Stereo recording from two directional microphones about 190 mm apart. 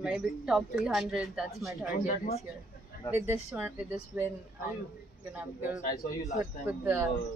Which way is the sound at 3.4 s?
5° right (ahead or behind).